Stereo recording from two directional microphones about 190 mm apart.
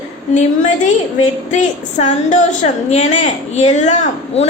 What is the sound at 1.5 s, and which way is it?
A woman's voice, 40° left (ahead or behind).